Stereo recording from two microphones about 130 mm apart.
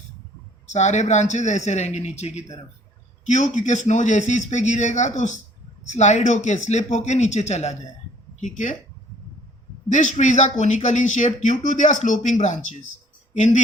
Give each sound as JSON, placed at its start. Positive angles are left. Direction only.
{"t": 0.7, "sound": "speech", "side_deg": 65}
{"t": 8.4, "sound": "speech", "side_deg": 75}
{"t": 9.9, "sound": "speech", "side_deg": 65}